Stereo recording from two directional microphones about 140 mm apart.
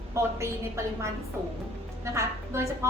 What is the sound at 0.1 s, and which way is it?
Speech, 20° right (ahead or behind).